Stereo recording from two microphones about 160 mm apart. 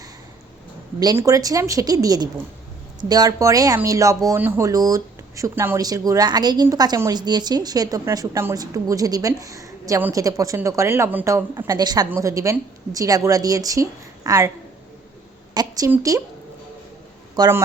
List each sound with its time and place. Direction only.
0.9 s speech: 20° right (ahead or behind)
15.5 s a woman's voice: 25° right (ahead or behind)
17.3 s speech: 25° right (ahead or behind)